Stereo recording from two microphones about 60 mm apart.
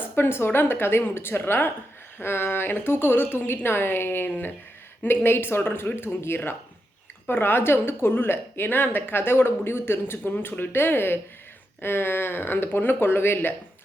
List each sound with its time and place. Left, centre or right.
0.0 s a woman's voice: left